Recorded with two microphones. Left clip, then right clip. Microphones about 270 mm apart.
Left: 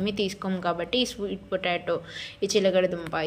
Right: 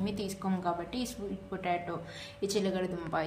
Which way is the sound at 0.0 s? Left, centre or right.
Centre.